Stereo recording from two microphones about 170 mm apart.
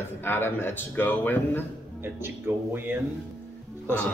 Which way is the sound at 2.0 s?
15° right (ahead or behind).